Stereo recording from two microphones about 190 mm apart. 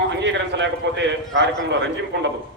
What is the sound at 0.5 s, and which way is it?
Speech, 70° right (ahead or behind).